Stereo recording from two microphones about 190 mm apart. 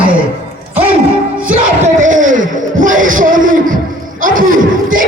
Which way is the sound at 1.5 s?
45° right (ahead or behind).